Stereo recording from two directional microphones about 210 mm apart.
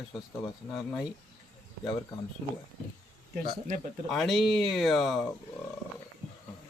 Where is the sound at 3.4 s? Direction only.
45° right (ahead or behind).